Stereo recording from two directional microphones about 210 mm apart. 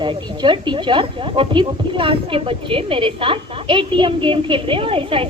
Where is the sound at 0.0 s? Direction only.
20° right (ahead or behind).